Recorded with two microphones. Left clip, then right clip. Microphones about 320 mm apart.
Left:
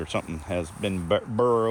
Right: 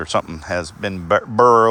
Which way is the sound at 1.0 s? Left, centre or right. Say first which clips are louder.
Right 10 dB; centre.